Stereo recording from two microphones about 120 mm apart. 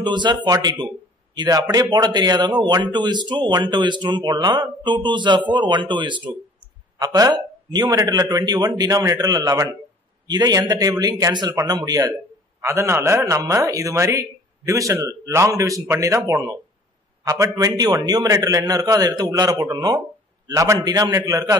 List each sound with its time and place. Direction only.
0.0 s a man's voice: 40° right (ahead or behind)